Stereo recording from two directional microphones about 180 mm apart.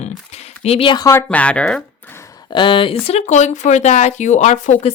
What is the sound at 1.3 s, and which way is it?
Speech, 5° left (ahead or behind).